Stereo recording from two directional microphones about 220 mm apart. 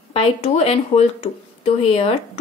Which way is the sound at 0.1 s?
30° left (ahead or behind).